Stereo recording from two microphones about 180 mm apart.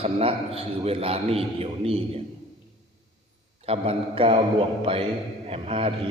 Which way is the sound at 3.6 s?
35° right (ahead or behind).